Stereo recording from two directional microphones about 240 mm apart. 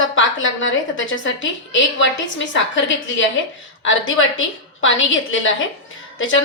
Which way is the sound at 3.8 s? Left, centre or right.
Left.